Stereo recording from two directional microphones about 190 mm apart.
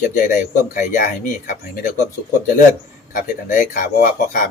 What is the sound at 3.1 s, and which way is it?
Speech, 45° left (ahead or behind).